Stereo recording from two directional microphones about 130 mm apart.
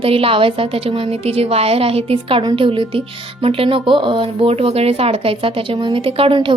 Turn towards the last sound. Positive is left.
turn(degrees=-40)  # may be behind; listen again after turning